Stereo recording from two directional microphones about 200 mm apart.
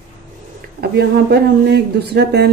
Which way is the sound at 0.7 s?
55° right (ahead or behind).